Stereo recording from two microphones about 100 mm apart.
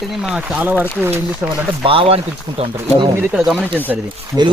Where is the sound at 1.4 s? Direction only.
15° right (ahead or behind).